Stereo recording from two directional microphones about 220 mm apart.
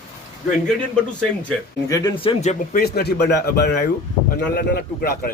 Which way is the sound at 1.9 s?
15° left (ahead or behind).